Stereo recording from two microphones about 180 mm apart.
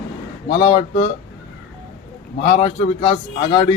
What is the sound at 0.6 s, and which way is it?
Speech, 30° left (ahead or behind).